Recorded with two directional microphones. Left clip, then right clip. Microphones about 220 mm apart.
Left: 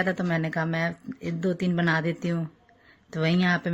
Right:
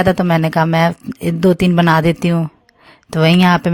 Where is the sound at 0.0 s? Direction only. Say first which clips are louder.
Right 13 dB; 45° right (ahead or behind).